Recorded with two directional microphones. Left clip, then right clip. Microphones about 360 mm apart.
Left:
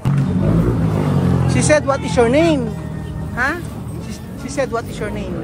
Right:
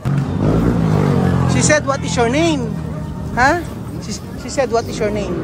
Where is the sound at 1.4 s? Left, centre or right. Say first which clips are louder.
Left 1 dB; centre.